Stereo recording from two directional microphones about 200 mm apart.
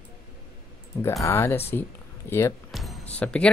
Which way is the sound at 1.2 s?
15° left (ahead or behind).